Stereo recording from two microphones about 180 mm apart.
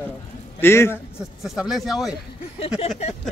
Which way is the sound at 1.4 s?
Centre (ahead or behind).